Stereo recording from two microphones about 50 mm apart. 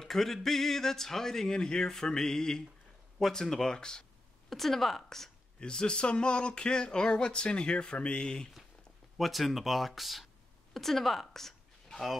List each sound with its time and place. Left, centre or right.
0.0 s speech: centre
4.5 s speech: centre
5.6 s speech: centre
9.2 s a woman's voice: centre